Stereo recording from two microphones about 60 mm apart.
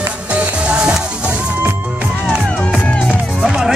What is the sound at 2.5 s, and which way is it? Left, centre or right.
Music, centre.